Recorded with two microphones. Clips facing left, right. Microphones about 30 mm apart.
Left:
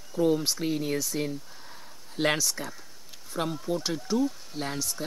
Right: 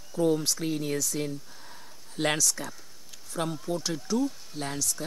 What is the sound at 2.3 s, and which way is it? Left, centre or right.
Speech, centre.